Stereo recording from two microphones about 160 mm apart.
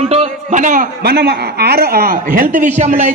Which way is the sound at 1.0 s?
90° right.